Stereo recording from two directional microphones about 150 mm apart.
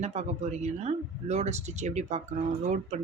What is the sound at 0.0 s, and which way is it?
Speech, 50° right (ahead or behind).